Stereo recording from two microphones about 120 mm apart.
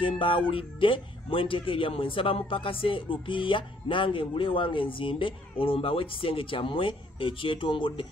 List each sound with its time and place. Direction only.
0.0 s speech: 45° left (ahead or behind)